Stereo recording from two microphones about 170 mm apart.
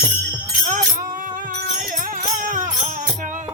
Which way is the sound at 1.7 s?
50° right (ahead or behind).